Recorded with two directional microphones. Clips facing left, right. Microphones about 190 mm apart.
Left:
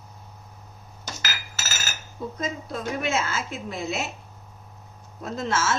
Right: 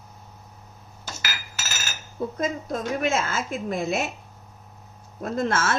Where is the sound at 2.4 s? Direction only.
45° right (ahead or behind).